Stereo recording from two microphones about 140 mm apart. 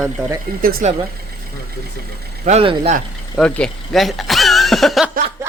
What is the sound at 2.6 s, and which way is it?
Speech, 40° right (ahead or behind).